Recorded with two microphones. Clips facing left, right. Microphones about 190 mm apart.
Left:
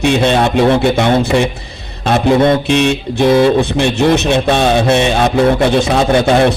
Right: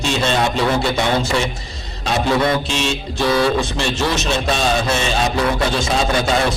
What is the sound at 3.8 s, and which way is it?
A man's voice, 60° left (ahead or behind).